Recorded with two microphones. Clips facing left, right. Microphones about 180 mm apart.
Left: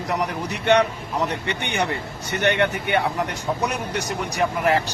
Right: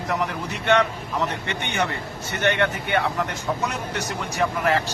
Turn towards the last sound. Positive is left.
turn(degrees=15)  # may be behind; listen again after turning